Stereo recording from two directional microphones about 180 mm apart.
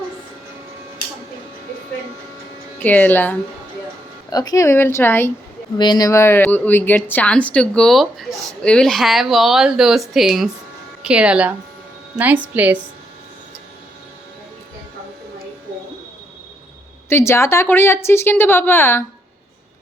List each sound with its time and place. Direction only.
2.7 s speech: 10° left (ahead or behind)
4.3 s speech: 20° left (ahead or behind)
5.7 s a woman's voice: 25° left (ahead or behind); by 12.8 s 10° right (ahead or behind)
17.1 s speech: 15° left (ahead or behind)